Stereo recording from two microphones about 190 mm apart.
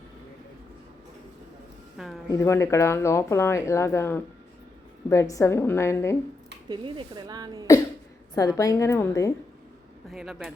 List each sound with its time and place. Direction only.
2.0 s a man's voice: centre (ahead or behind)
2.3 s speech: 15° left (ahead or behind)
6.7 s speech: 25° right (ahead or behind)
8.4 s speech: 15° left (ahead or behind)
10.1 s a man's voice: centre (ahead or behind)